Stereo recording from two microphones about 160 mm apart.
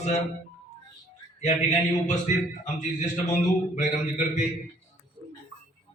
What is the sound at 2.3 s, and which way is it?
A man's voice, 50° left (ahead or behind).